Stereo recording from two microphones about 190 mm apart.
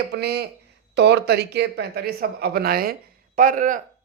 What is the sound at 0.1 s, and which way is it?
A woman's voice, 60° right (ahead or behind).